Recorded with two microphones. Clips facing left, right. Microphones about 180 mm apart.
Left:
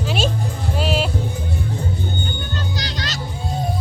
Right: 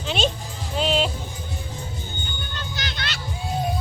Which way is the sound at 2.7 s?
35° left (ahead or behind).